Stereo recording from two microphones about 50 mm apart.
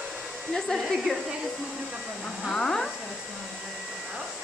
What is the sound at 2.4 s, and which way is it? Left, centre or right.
Speech, centre.